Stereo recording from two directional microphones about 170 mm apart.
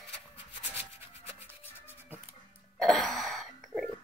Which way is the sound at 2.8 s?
Centre (ahead or behind).